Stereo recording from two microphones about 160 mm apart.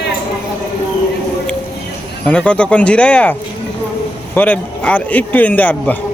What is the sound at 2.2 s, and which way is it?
Speech, 10° left (ahead or behind).